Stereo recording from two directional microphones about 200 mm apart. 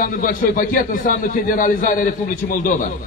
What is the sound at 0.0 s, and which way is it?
A man's voice, 45° left (ahead or behind).